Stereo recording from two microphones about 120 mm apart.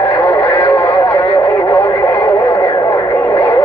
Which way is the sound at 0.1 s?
20° left (ahead or behind).